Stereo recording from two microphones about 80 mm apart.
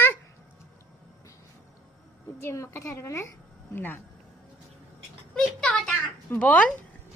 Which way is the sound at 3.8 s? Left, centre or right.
Left.